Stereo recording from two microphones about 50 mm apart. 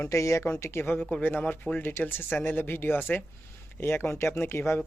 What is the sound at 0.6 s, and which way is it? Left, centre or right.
A man's voice, left.